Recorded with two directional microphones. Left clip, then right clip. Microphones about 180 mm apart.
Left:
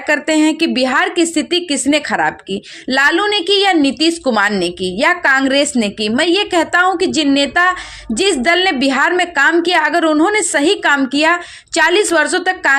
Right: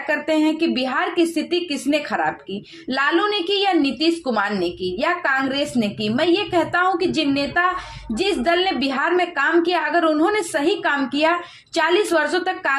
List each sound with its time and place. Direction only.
0.1 s a woman's voice: 30° left (ahead or behind)